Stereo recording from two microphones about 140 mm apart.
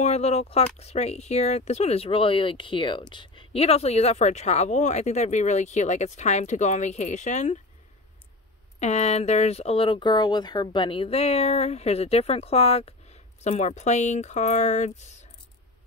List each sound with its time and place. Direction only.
0.0 s speech: 50° left (ahead or behind)
8.7 s speech: 55° left (ahead or behind)